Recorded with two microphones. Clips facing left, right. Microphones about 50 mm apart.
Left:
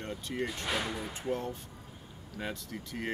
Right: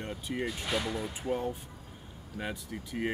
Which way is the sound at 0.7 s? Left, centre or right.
Centre.